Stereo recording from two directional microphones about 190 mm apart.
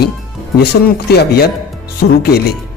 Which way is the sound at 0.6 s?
60° left (ahead or behind).